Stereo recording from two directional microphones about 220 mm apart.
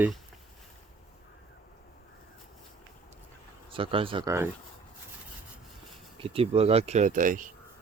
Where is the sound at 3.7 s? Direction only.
25° right (ahead or behind).